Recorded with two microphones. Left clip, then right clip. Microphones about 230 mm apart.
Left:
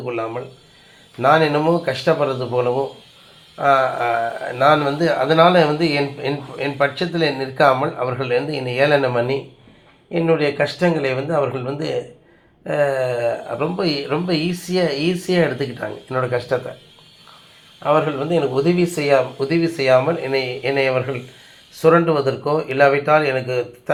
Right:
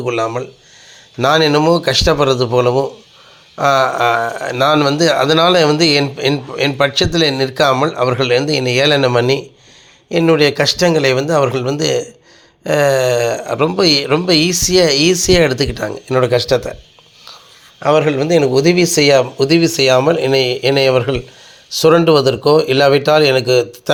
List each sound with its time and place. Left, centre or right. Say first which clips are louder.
0.0 s speech: right 7 dB; right
17.7 s speech: right 5 dB; right